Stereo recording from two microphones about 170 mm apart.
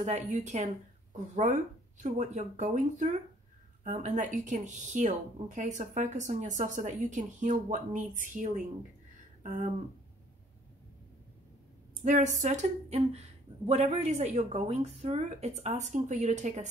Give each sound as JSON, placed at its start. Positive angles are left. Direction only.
{"t": 0.0, "sound": "speech", "side_deg": -45}
{"t": 9.4, "sound": "a sound", "side_deg": -50}
{"t": 12.0, "sound": "speech", "side_deg": -45}